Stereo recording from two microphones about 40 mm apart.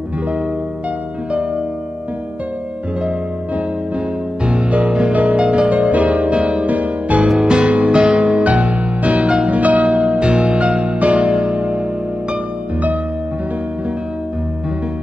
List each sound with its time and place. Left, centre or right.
4.5 s music: right
6.7 s music: right
7.2 s music: centre
9.5 s music: right